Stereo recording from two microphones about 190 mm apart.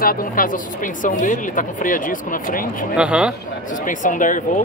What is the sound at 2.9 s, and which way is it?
Speech, 5° right (ahead or behind).